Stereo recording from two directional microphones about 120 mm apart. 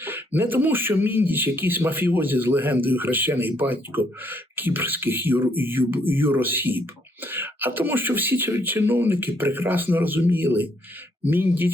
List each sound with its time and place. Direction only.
0.0 s a man's voice: 15° right (ahead or behind)